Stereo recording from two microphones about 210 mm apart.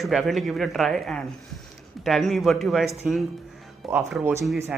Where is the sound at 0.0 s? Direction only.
Centre (ahead or behind).